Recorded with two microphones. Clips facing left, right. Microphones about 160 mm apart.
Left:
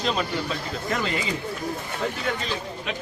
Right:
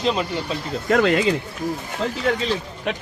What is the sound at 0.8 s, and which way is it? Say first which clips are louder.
Speech: right 11 dB; 65° right (ahead or behind).